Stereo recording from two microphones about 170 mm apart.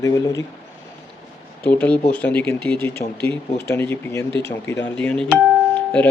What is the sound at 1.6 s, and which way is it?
Speech, 10° left (ahead or behind).